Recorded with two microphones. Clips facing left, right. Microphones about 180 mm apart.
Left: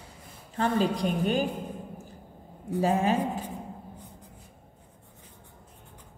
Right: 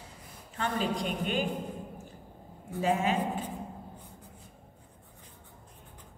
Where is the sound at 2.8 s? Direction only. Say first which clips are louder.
Left 3 dB; 40° left (ahead or behind).